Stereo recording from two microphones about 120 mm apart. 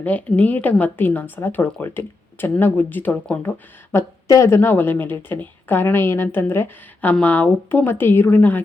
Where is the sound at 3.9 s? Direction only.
25° left (ahead or behind).